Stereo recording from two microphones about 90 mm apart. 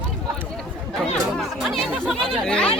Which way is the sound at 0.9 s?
Centre (ahead or behind).